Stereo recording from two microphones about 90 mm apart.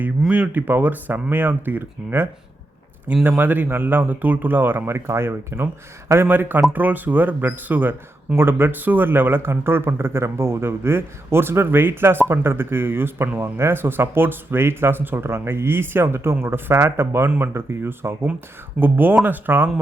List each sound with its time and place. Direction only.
0.3 s speech: 15° right (ahead or behind)